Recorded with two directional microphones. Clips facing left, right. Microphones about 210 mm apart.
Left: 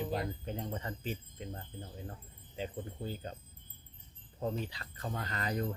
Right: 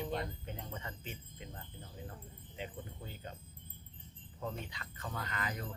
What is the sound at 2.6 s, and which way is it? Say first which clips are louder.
Speech: left 6 dB; 35° left (ahead or behind).